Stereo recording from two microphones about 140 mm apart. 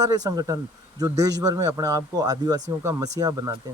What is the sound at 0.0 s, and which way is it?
Speech, 25° right (ahead or behind).